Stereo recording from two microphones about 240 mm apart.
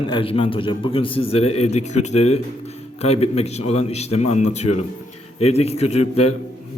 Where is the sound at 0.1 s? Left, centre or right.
Left.